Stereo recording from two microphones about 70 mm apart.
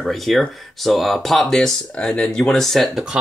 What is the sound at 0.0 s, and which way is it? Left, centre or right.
Speech, centre.